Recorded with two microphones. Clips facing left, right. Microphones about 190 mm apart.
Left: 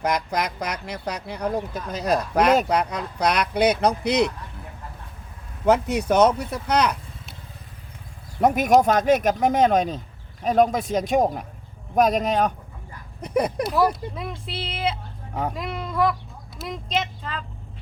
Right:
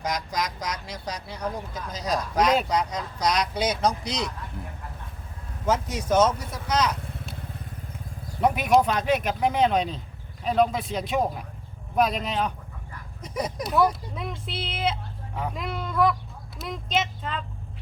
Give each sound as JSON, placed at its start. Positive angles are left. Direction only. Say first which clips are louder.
{"t": 0.0, "sound": "speech", "louder": "left 5 dB", "side_deg": 60}
{"t": 5.6, "sound": "speech", "louder": "left 6 dB", "side_deg": 65}
{"t": 8.4, "sound": "speech", "louder": "left 3 dB", "side_deg": 45}
{"t": 13.2, "sound": "speech", "louder": "left 7 dB", "side_deg": 60}
{"t": 14.2, "sound": "speech", "louder": "left 1 dB", "side_deg": 0}